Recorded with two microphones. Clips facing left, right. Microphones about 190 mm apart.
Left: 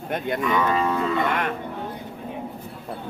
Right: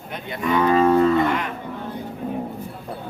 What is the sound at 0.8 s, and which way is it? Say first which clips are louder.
Speech: right 8 dB; 45° right (ahead or behind).